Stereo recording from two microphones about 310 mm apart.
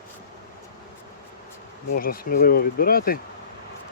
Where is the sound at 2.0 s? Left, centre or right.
Left.